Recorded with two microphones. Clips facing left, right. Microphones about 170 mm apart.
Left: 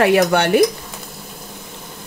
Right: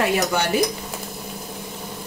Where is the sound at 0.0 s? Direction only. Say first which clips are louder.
Left 7 dB; 65° left (ahead or behind).